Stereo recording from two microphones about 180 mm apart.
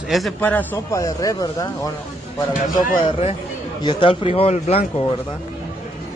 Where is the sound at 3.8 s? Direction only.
25° left (ahead or behind).